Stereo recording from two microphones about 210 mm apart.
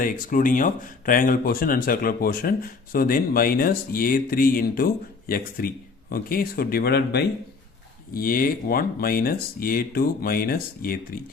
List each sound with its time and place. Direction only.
0.0 s speech: 40° left (ahead or behind)